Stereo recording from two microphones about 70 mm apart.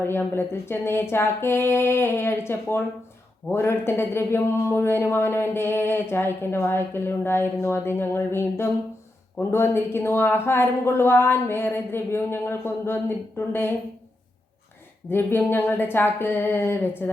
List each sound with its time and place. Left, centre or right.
0.0 s a man's voice: left
15.1 s a man's voice: left